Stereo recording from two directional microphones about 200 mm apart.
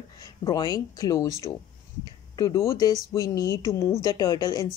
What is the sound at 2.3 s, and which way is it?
Speech, 15° left (ahead or behind).